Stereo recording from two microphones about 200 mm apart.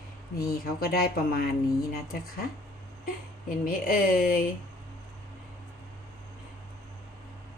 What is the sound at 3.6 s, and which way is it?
Speech, 45° left (ahead or behind).